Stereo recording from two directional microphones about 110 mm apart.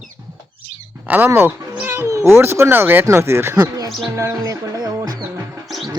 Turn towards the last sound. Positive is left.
turn(degrees=-25)  # may be behind; listen again after turning